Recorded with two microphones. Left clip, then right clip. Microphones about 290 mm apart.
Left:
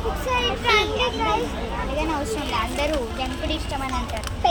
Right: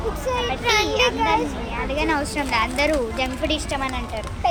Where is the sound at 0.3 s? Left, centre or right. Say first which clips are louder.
Left 1 dB; right.